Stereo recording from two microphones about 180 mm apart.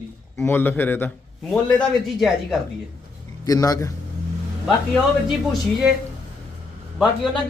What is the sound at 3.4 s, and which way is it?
Speech, 20° left (ahead or behind).